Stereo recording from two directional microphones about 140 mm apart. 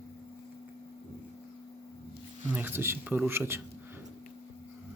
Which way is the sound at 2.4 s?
15° right (ahead or behind).